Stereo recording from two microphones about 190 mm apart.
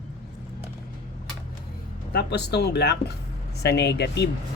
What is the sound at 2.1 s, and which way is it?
Speech, 60° left (ahead or behind).